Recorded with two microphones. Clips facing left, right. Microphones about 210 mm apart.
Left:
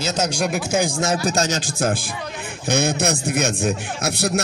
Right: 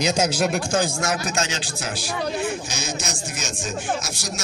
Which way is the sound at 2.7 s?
60° left (ahead or behind).